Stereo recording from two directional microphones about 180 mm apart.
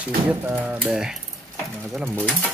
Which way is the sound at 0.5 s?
10° right (ahead or behind).